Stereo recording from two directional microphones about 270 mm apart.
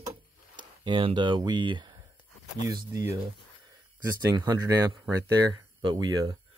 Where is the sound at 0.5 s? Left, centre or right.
Centre.